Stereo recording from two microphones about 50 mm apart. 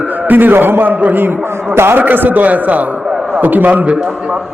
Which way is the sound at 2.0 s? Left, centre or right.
Right.